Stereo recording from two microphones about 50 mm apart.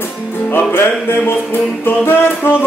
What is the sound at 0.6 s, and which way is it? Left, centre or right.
Music, left.